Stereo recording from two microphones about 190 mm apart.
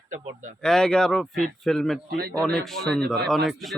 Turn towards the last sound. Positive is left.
turn(degrees=0)  # may be behind; listen again after turning